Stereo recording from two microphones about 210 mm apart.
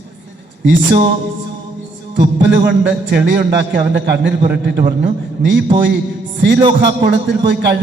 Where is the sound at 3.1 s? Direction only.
55° right (ahead or behind).